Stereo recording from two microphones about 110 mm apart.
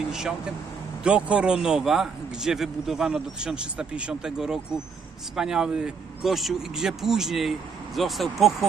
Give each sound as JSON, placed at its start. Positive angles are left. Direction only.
{"t": 1.0, "sound": "a man's voice", "side_deg": -10}